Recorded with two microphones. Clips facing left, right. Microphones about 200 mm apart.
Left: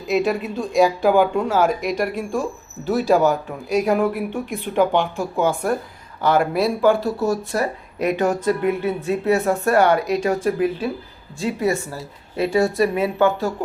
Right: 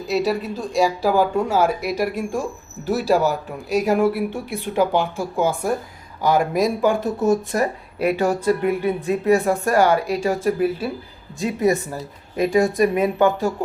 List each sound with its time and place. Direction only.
0.1 s speech: centre (ahead or behind)